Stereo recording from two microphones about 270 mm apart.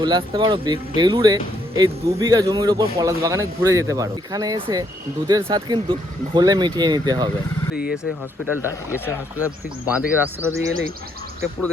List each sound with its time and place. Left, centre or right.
0.0 s speech: centre
8.5 s speech: centre
9.4 s speech: centre